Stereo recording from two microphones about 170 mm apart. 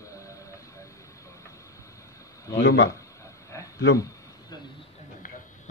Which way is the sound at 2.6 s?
90° left.